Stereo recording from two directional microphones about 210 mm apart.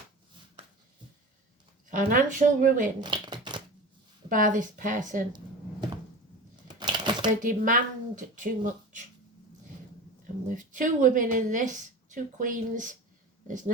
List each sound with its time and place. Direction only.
1.9 s speech: 40° right (ahead or behind)
3.0 s shuffling cards: 20° right (ahead or behind)
4.3 s speech: 40° right (ahead or behind)
6.7 s a sound: 20° right (ahead or behind)
7.4 s speech: 40° right (ahead or behind)
10.5 s speech: 40° right (ahead or behind)